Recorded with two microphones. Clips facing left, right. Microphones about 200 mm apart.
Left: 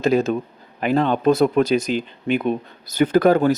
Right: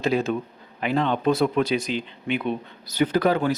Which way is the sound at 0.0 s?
40° left (ahead or behind).